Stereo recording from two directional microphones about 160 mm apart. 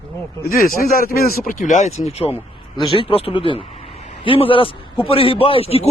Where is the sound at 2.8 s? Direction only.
30° left (ahead or behind).